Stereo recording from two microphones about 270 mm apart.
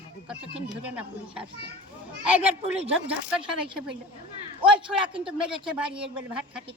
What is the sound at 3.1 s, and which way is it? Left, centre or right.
A woman's voice, centre.